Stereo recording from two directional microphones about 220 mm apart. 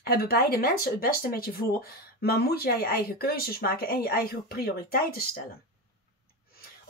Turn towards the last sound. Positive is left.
turn(degrees=45)  # may be behind; listen again after turning